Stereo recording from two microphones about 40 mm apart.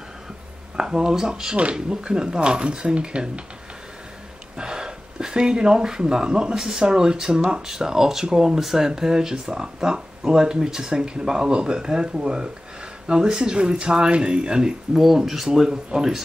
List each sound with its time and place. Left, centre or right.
0.7 s speech: centre
1.6 s speech: right
2.0 s speech: centre
4.6 s speech: centre
15.0 s speech: centre